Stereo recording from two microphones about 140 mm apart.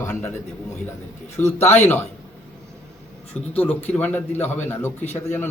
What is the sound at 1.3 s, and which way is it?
Speech, 15° left (ahead or behind).